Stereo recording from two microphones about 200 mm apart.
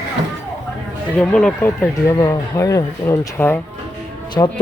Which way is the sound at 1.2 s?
5° left (ahead or behind).